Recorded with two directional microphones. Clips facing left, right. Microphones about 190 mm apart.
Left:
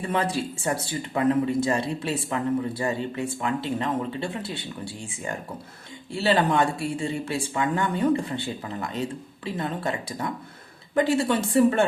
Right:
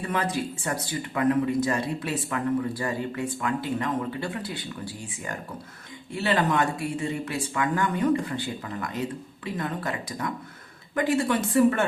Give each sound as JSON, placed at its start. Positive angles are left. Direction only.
{"t": 0.1, "sound": "speech", "side_deg": 30}
{"t": 6.1, "sound": "speech", "side_deg": 30}